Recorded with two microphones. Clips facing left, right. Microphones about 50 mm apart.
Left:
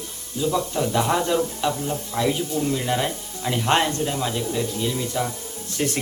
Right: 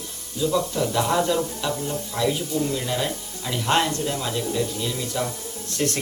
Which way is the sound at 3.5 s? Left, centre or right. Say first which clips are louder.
Left 1 dB; centre.